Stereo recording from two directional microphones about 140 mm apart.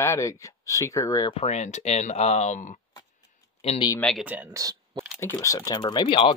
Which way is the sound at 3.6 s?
45° left (ahead or behind).